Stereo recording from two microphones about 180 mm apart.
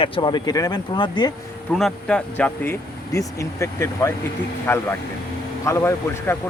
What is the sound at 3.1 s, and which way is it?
Speech, 15° left (ahead or behind).